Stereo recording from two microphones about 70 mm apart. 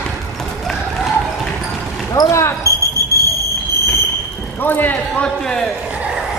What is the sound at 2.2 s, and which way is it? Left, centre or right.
Basketball bounce, left.